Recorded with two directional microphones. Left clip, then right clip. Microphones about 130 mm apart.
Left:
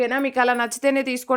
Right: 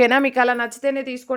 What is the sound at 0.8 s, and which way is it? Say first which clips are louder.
Speech: left 5 dB; 35° left (ahead or behind).